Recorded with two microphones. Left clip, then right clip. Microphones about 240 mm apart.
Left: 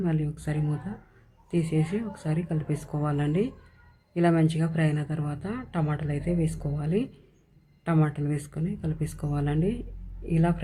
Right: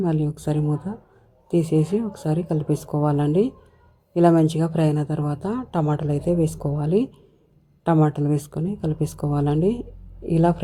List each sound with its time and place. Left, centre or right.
0.0 s a woman's voice: right